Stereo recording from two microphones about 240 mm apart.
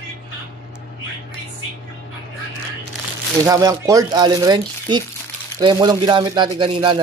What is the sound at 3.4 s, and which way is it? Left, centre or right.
Speech, centre.